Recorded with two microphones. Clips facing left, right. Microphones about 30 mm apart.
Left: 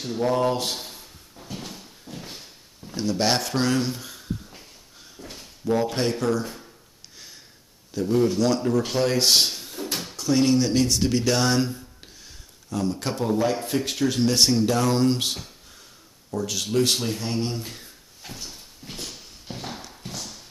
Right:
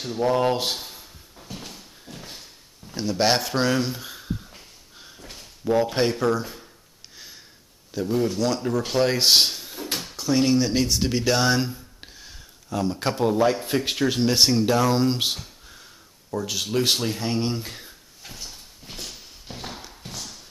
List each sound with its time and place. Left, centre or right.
0.0 s speech: centre
0.4 s speech: centre
0.7 s a sound: centre
2.9 s speech: centre
5.0 s a sound: centre
5.7 s speech: centre
7.9 s speech: centre
9.0 s drawer open or close: centre
10.1 s speech: centre
12.0 s a sound: centre
13.7 s speech: right
18.2 s horse: centre